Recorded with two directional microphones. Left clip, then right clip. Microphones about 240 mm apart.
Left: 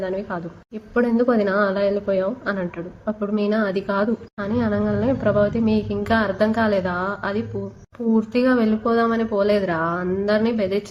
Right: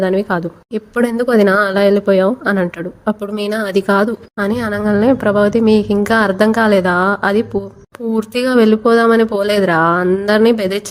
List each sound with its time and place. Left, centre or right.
0.0 s a woman's voice: right